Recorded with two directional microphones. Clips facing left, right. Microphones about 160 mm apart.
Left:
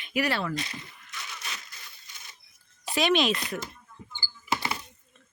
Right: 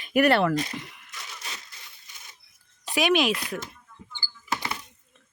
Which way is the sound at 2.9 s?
10° right (ahead or behind).